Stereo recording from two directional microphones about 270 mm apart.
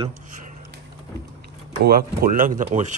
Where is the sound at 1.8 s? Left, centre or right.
Right.